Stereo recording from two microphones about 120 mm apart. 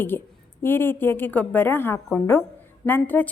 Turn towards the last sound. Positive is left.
turn(degrees=15)  # may be behind; listen again after turning